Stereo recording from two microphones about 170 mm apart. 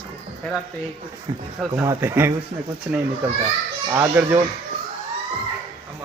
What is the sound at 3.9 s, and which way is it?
Speech, 10° right (ahead or behind).